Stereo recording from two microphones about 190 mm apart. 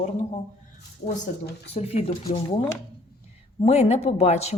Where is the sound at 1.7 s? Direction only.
35° left (ahead or behind).